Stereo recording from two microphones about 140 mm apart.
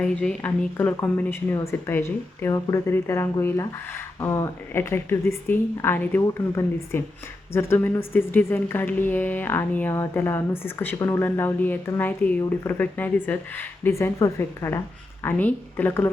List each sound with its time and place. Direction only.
0.0 s a woman's voice: 5° left (ahead or behind)